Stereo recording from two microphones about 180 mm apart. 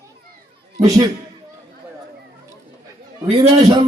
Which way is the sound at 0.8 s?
20° right (ahead or behind).